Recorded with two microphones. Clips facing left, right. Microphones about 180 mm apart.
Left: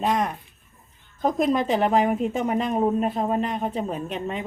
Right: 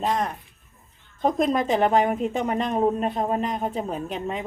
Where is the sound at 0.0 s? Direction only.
Centre (ahead or behind).